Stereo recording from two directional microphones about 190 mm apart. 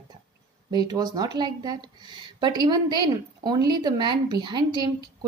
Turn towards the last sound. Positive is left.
turn(degrees=-25)  # may be behind; listen again after turning